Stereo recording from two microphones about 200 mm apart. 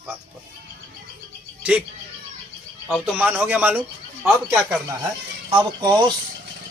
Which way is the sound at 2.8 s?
5° right (ahead or behind).